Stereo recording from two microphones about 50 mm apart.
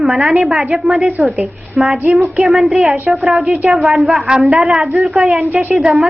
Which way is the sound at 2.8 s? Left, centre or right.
Right.